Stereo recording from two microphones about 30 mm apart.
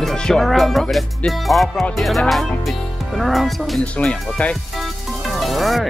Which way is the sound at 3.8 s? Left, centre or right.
Left.